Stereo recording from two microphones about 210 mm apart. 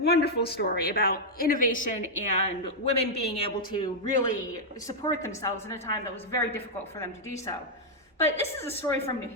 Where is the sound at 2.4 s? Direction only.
30° left (ahead or behind); by 7.1 s 10° left (ahead or behind).